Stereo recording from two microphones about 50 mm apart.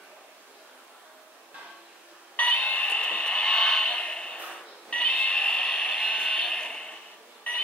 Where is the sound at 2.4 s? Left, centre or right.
Left.